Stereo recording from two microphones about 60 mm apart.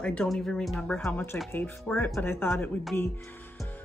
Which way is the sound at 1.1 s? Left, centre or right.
Left.